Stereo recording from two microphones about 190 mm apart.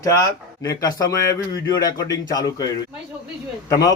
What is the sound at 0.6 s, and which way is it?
A man's voice, 20° left (ahead or behind).